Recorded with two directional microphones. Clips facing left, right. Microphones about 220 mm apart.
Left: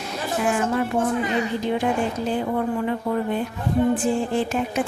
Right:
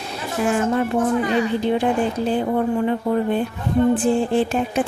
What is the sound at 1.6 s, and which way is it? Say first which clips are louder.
A woman's voice: right 3 dB; 30° right (ahead or behind).